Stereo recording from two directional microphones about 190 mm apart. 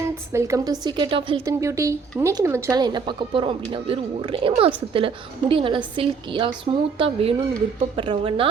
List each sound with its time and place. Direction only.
0.0 s a woman's voice: 15° right (ahead or behind)
1.5 s speech: 15° right (ahead or behind)